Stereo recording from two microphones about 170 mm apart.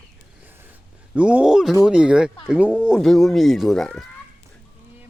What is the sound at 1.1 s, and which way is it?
Speech, 5° right (ahead or behind).